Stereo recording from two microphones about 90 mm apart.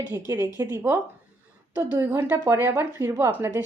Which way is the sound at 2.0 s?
25° right (ahead or behind).